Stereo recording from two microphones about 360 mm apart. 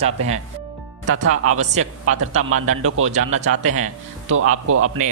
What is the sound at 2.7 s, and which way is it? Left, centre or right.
Speech, right.